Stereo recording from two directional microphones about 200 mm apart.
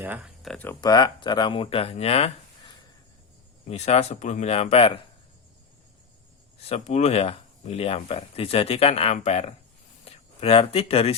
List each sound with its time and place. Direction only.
0.0 s speech: 5° right (ahead or behind)
0.8 s speech: 20° left (ahead or behind)
6.7 s speech: 30° left (ahead or behind)
10.0 s a sound: 30° left (ahead or behind)